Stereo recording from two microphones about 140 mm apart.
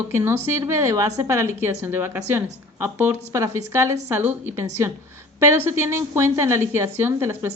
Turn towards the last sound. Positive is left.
turn(degrees=-20)  # may be behind; listen again after turning